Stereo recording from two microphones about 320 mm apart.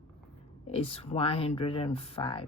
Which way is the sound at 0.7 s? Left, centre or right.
Centre.